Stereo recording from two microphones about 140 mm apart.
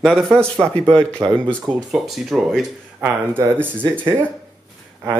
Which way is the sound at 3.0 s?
15° right (ahead or behind).